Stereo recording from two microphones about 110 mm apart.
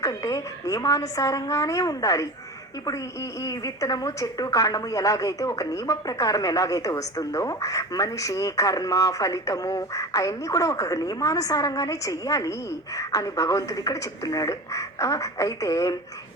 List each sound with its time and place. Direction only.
0.0 s a woman's voice: 30° left (ahead or behind)
3.4 s a woman's voice: 35° left (ahead or behind)